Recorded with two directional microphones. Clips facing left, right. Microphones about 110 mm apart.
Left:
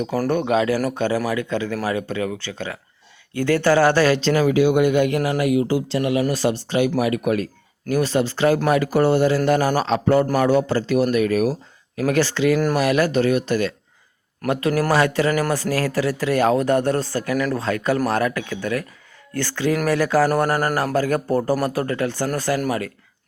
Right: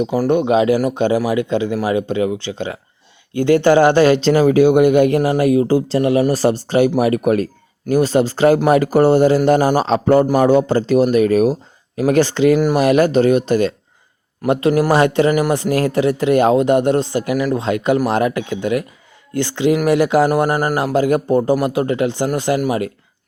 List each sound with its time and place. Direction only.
0.0 s a man's voice: 15° right (ahead or behind)